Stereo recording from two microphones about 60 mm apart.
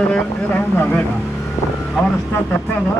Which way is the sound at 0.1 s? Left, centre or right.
Left.